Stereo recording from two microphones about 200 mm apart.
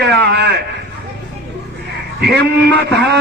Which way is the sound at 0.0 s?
55° right (ahead or behind).